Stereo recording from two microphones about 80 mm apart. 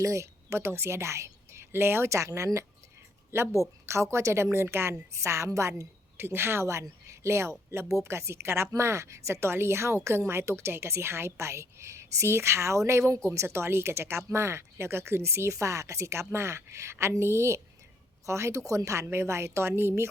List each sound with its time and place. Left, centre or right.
0.0 s a woman's voice: right